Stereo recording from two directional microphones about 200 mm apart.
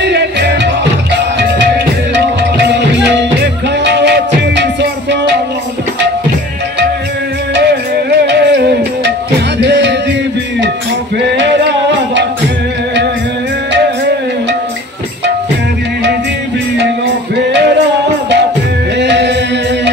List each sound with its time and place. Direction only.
0.0 s music: 55° right (ahead or behind)
2.1 s music: 60° right (ahead or behind)
8.3 s music: 55° right (ahead or behind)
9.6 s music: 60° right (ahead or behind)
11.1 s a sound: 60° right (ahead or behind)
18.9 s music: 60° right (ahead or behind)